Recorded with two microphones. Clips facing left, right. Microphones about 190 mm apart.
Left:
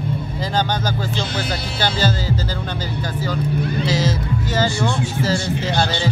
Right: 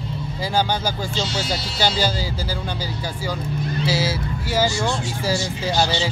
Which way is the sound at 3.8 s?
10° right (ahead or behind).